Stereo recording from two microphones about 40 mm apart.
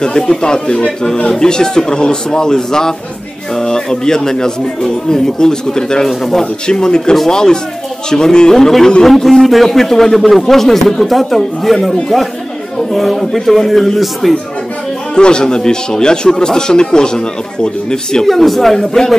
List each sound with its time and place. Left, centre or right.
0.0 s speech: centre
6.7 s a man's voice: centre
15.1 s speech: left
18.2 s a man's voice: centre